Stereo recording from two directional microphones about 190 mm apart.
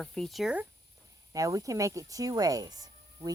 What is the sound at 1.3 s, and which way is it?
Speech, 15° right (ahead or behind).